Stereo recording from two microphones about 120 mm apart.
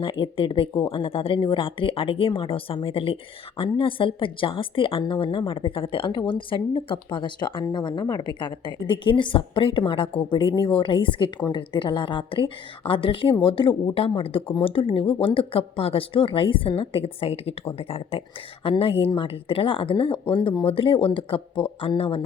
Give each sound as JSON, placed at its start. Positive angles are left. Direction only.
{"t": 0.0, "sound": "a woman's voice", "side_deg": 45}
{"t": 10.1, "sound": "speech", "side_deg": 10}
{"t": 10.5, "sound": "a woman's voice", "side_deg": 40}